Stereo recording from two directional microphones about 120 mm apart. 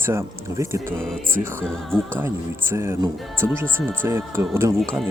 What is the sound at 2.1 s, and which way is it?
Speech, 20° right (ahead or behind).